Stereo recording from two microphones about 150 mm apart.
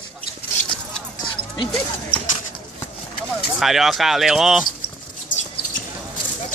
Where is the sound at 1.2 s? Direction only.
30° left (ahead or behind).